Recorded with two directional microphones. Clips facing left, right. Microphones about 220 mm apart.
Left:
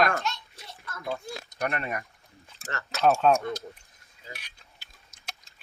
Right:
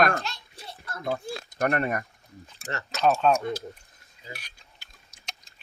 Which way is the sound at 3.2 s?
Centre (ahead or behind).